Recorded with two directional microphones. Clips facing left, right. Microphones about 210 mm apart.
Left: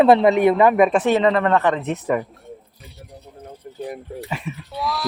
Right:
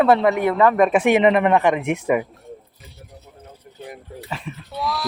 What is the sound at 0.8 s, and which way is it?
Speech, 5° right (ahead or behind).